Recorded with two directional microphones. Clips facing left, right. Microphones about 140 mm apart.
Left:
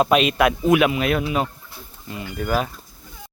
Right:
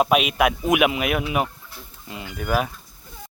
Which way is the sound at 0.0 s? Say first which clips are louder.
Left 2 dB; 5° right (ahead or behind).